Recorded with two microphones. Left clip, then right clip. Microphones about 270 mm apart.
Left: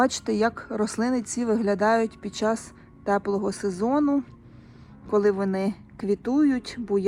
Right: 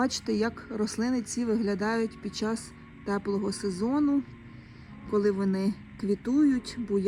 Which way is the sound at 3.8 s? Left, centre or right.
Left.